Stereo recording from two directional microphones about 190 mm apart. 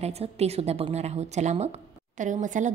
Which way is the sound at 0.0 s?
35° right (ahead or behind).